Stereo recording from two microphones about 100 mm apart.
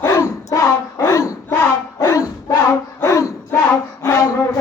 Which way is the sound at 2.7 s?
30° left (ahead or behind).